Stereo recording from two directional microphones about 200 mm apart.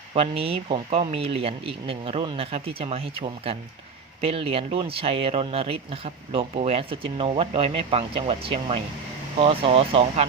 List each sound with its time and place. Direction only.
0.1 s speech: 30° right (ahead or behind)